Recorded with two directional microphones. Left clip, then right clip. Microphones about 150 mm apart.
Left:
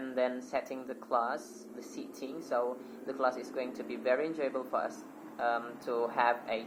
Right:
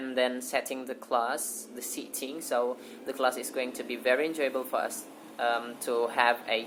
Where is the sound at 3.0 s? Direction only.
50° right (ahead or behind).